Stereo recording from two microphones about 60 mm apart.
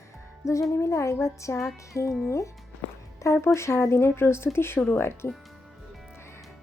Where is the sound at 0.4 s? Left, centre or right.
Left.